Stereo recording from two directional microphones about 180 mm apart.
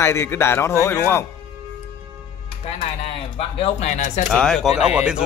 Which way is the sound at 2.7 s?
35° left (ahead or behind).